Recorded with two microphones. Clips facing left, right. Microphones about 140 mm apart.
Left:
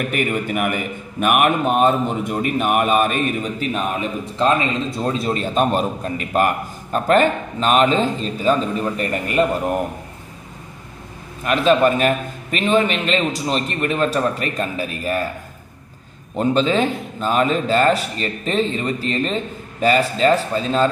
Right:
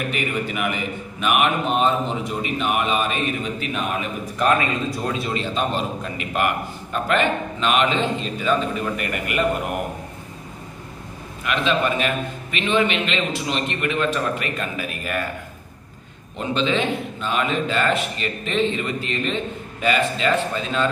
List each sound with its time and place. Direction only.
0.1 s a man's voice: 50° left (ahead or behind); by 5.1 s 25° left (ahead or behind)
5.1 s a man's voice: 40° left (ahead or behind)
11.4 s a man's voice: 40° left (ahead or behind)
16.3 s a man's voice: 40° left (ahead or behind)